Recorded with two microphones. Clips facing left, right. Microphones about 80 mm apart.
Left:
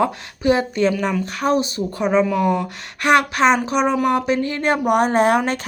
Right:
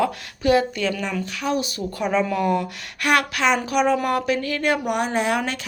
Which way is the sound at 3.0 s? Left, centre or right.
Left.